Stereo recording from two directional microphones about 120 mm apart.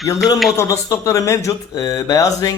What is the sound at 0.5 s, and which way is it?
Speech, 25° left (ahead or behind).